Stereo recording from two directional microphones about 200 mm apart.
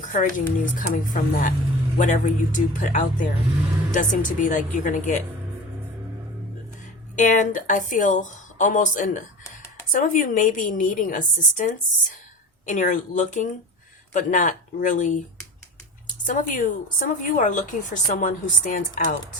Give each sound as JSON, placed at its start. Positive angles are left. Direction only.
{"t": 0.1, "sound": "a woman's voice", "side_deg": 40}
{"t": 7.2, "sound": "a woman's voice", "side_deg": 40}